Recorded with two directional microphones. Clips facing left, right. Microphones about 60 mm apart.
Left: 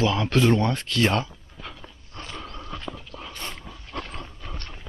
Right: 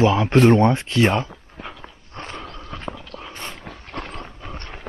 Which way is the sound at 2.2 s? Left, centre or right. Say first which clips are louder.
Right 3 dB; right.